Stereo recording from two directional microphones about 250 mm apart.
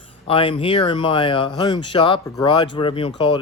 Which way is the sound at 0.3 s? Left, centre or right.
Left.